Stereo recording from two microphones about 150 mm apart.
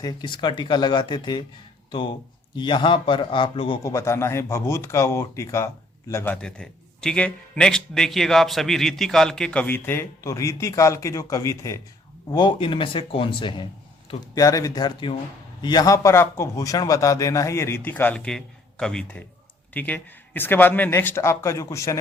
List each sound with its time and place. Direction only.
0.0 s speech: 25° left (ahead or behind)
3.8 s a man's voice: 20° left (ahead or behind)
12.3 s a man's voice: 30° left (ahead or behind)